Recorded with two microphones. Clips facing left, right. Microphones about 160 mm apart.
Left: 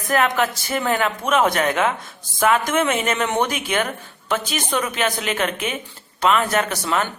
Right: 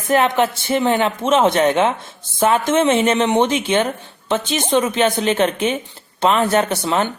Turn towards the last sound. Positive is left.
turn(degrees=-30)  # may be behind; listen again after turning